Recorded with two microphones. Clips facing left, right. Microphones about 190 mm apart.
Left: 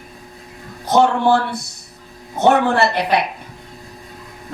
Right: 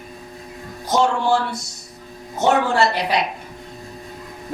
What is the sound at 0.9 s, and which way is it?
A woman's voice, 60° left (ahead or behind).